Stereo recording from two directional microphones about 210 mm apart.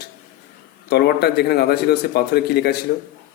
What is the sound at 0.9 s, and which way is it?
A man's voice, 50° left (ahead or behind).